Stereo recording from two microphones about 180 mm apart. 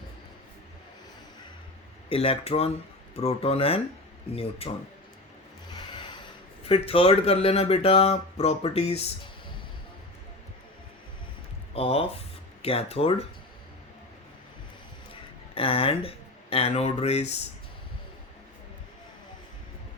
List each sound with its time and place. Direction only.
2.0 s speech: 30° left (ahead or behind)
5.7 s music: 25° left (ahead or behind)
6.7 s speech: 35° left (ahead or behind)
11.7 s speech: 30° left (ahead or behind)
15.5 s speech: 30° left (ahead or behind)